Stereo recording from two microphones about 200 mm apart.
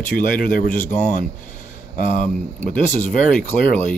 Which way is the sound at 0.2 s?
45° left (ahead or behind).